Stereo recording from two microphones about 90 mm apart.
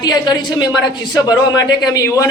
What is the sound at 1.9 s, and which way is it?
Speech, 35° left (ahead or behind).